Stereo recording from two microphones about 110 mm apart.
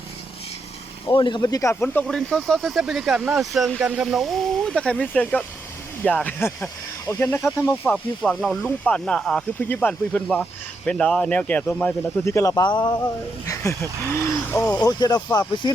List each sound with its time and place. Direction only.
1.1 s speech: 45° left (ahead or behind)
1.7 s speech: 15° left (ahead or behind)
2.0 s speech: 5° left (ahead or behind); by 3.4 s 15° right (ahead or behind)
3.9 s speech: centre (ahead or behind); by 7.6 s 25° left (ahead or behind)
7.9 s speech: 5° left (ahead or behind)
8.6 s speech: 10° left (ahead or behind)
9.6 s speech: 15° left (ahead or behind)
10.1 s speech: centre (ahead or behind)
12.2 s speech: 25° left (ahead or behind); by 13.0 s 45° left (ahead or behind)
13.4 s speech: 30° left (ahead or behind)
14.7 s speech: 40° left (ahead or behind)